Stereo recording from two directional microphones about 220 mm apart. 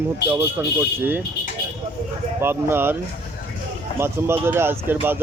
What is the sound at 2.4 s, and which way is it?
Speech, 10° right (ahead or behind).